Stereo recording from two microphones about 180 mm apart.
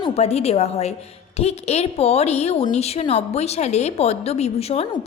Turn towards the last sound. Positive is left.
turn(degrees=35)  # may be behind; listen again after turning